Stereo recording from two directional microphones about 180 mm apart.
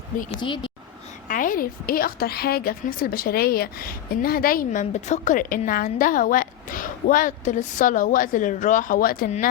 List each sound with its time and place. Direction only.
0.3 s speech: 25° left (ahead or behind)
1.3 s a woman's voice: 50° left (ahead or behind)